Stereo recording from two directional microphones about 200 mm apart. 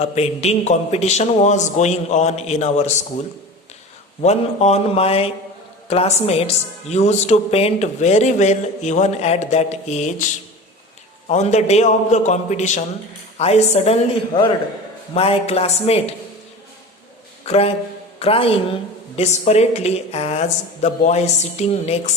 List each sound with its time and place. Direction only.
0.0 s speech: 30° left (ahead or behind)
4.2 s speech: 35° left (ahead or behind)
11.3 s speech: 35° left (ahead or behind)
17.4 s speech: 30° left (ahead or behind)